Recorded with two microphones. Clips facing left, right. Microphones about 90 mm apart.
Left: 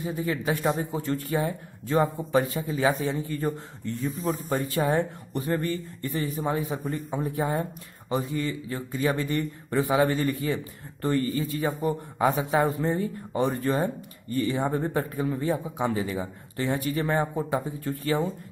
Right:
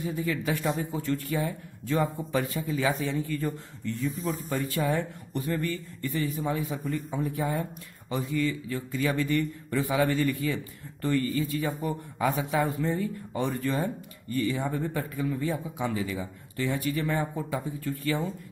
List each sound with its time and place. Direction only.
0.0 s speech: 30° left (ahead or behind)